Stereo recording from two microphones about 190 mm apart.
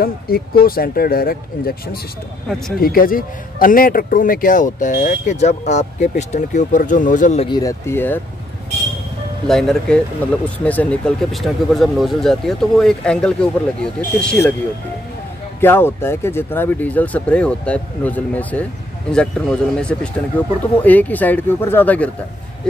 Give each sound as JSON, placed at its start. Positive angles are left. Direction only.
{"t": 0.0, "sound": "speech", "side_deg": 50}
{"t": 7.4, "sound": "speech", "side_deg": 20}
{"t": 9.5, "sound": "speech", "side_deg": 0}
{"t": 15.6, "sound": "speech", "side_deg": 10}